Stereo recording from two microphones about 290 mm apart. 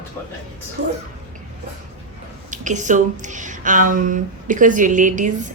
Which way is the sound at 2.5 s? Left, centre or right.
Right.